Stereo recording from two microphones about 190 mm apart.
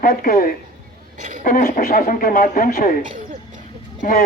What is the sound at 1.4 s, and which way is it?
Speech, 45° left (ahead or behind).